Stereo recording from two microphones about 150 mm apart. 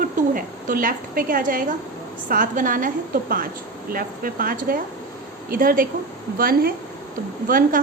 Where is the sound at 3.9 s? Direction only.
75° right (ahead or behind).